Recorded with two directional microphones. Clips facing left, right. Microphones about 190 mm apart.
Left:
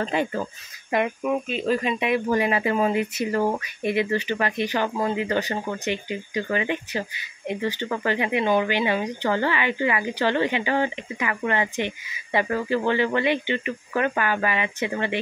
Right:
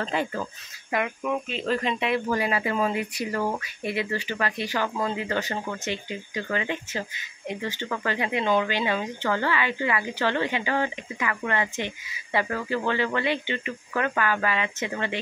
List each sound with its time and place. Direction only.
0.0 s speech: 15° left (ahead or behind)